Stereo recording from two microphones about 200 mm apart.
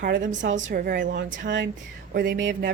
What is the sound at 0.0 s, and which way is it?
Speech, 55° right (ahead or behind).